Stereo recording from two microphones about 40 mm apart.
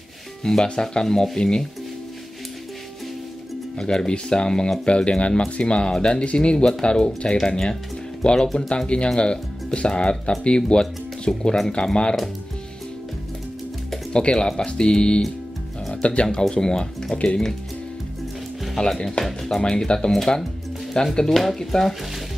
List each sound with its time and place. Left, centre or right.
0.4 s speech: centre
3.7 s speech: centre
14.1 s speech: left
17.1 s speech: left
18.8 s speech: left
19.2 s speech: centre
19.6 s speech: left
21.3 s speech: centre